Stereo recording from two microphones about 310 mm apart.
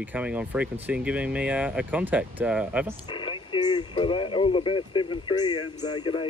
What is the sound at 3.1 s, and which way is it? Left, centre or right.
Speech, centre.